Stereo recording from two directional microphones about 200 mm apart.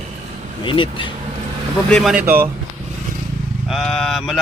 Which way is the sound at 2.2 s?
10° right (ahead or behind).